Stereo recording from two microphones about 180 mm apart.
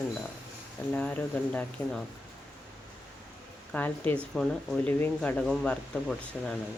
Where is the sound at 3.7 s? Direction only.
10° left (ahead or behind).